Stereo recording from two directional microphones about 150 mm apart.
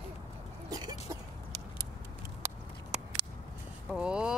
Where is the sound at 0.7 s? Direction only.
25° right (ahead or behind).